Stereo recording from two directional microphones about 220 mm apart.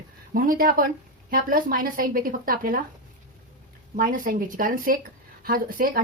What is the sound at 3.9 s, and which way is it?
A woman's voice, 40° right (ahead or behind).